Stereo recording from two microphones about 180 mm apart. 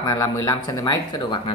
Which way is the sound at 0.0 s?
20° left (ahead or behind).